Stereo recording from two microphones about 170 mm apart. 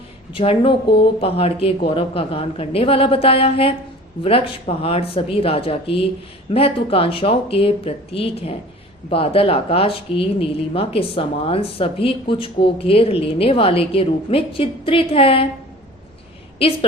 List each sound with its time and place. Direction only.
0.3 s speech: 30° left (ahead or behind)